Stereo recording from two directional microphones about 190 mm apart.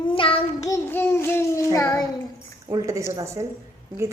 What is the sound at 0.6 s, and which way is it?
Child singing, 15° left (ahead or behind).